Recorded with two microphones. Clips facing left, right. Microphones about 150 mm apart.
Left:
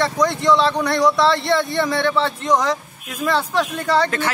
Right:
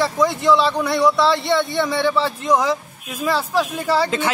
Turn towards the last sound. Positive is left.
turn(degrees=-5)  # may be behind; listen again after turning